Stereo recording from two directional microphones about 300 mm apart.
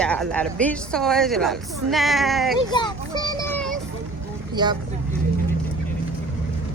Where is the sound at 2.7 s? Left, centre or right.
Centre.